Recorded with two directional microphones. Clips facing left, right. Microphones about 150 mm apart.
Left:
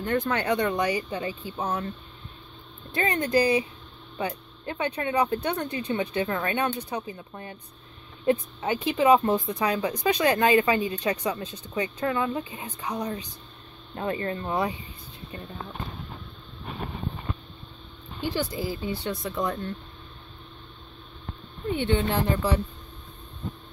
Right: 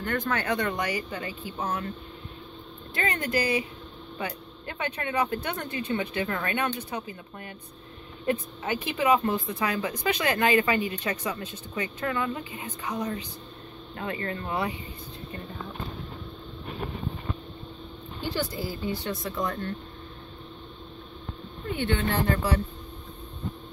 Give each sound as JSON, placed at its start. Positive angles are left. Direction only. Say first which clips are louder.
{"t": 0.0, "sound": "speech", "louder": "left 3 dB", "side_deg": 20}
{"t": 3.0, "sound": "speech", "louder": "left 5 dB", "side_deg": 20}
{"t": 18.6, "sound": "speech", "louder": "left 1 dB", "side_deg": 15}
{"t": 21.7, "sound": "speech", "louder": "left 2 dB", "side_deg": 20}